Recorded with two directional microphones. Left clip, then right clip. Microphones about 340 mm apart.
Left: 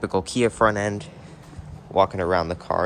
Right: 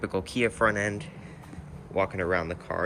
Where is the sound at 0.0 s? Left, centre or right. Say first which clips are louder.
Left 5 dB; centre.